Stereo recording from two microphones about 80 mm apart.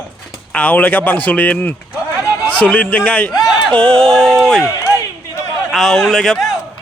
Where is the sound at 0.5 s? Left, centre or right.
Left.